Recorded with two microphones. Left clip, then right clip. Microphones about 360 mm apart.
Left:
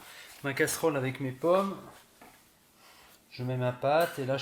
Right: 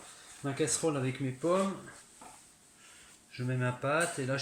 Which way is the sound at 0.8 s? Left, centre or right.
Left.